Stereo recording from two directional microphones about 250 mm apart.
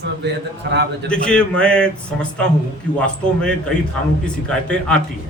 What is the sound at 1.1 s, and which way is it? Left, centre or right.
A man's voice, centre.